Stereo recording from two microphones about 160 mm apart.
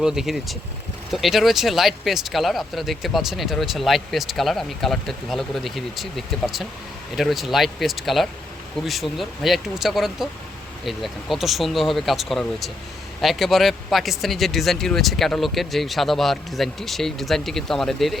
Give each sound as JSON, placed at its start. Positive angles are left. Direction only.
{"t": 0.0, "sound": "speech", "side_deg": -5}